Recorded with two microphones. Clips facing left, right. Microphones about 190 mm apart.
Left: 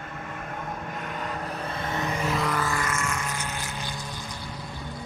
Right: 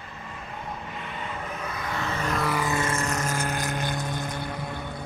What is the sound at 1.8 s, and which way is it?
Vehicle, 20° left (ahead or behind).